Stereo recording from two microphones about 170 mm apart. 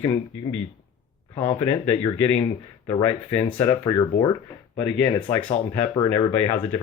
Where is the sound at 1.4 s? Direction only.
25° left (ahead or behind).